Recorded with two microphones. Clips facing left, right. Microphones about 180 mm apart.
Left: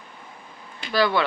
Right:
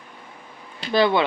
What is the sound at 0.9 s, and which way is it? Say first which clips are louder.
Speech: right 3 dB; 25° right (ahead or behind).